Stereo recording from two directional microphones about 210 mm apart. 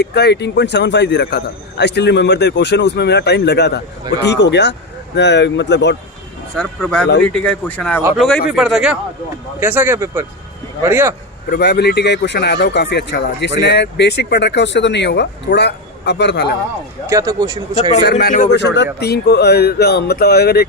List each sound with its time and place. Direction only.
0.0 s speech: 50° left (ahead or behind)
6.6 s speech: 5° left (ahead or behind); by 11.1 s 10° right (ahead or behind)
11.5 s speech: 50° left (ahead or behind)
17.1 s speech: 15° right (ahead or behind)
18.0 s speech: 50° left (ahead or behind)
18.6 s speech: 55° left (ahead or behind)